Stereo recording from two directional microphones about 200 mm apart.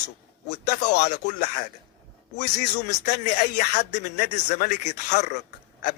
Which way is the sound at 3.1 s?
40° left (ahead or behind).